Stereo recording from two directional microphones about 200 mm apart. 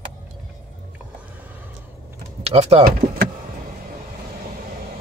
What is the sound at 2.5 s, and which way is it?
Speech, 30° right (ahead or behind).